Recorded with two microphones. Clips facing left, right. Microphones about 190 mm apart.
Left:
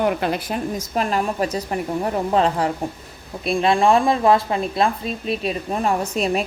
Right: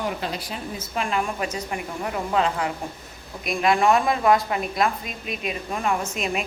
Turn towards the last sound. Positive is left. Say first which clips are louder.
# left 5 dB
turn(degrees=35)  # may be behind; listen again after turning